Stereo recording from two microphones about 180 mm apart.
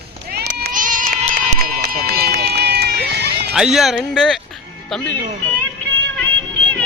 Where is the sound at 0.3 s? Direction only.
60° right (ahead or behind).